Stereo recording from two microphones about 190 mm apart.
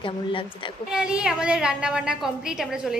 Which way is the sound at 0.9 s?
5° right (ahead or behind).